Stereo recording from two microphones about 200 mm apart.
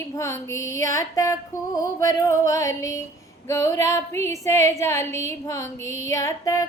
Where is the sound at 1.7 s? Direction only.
15° left (ahead or behind).